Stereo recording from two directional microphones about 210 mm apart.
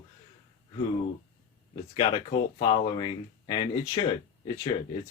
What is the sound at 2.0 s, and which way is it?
Speech, 20° left (ahead or behind).